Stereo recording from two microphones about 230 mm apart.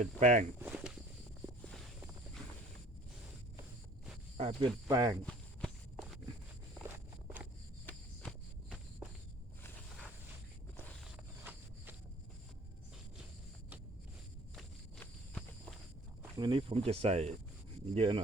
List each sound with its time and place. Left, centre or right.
0.0 s speech: right
0.6 s walk: centre
4.4 s speech: right
4.9 s speech: centre
5.2 s walk: centre
9.0 s walk: centre
11.5 s a sound: centre
14.5 s walk: centre
16.4 s speech: right